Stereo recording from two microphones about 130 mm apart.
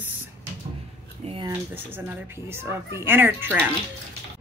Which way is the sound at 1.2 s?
45° right (ahead or behind).